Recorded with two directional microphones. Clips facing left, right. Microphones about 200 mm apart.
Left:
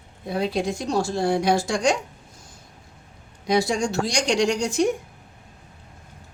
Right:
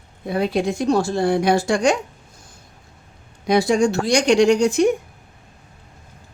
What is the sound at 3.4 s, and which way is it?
Speech, 60° right (ahead or behind).